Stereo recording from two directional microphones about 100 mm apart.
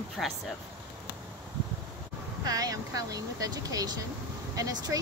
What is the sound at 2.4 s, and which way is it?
Speech, 40° right (ahead or behind).